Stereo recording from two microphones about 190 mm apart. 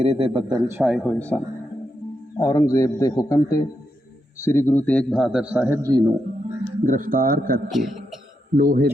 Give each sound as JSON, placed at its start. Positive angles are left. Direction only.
{"t": 0.0, "sound": "a man's voice", "side_deg": -30}
{"t": 0.8, "sound": "a man's voice", "side_deg": -5}
{"t": 2.4, "sound": "a man's voice", "side_deg": 20}
{"t": 6.8, "sound": "a man's voice", "side_deg": -45}
{"t": 7.7, "sound": "a man's voice", "side_deg": 0}
{"t": 8.5, "sound": "a man's voice", "side_deg": -50}